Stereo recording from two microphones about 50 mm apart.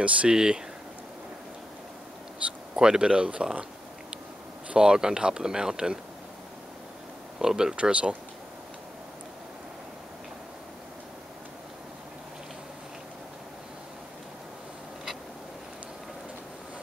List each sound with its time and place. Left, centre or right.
0.0 s speech: centre
2.7 s speech: centre
4.6 s speech: centre
7.3 s speech: centre